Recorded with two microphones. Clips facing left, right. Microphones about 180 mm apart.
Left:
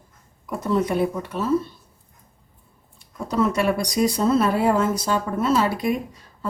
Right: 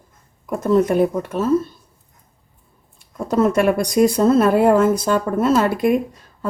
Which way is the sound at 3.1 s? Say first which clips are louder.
Right 5 dB; 50° right (ahead or behind).